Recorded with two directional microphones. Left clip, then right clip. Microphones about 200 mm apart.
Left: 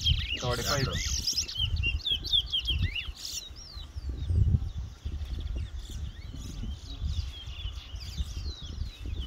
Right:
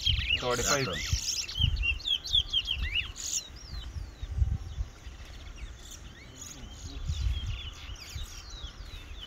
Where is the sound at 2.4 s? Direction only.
25° right (ahead or behind).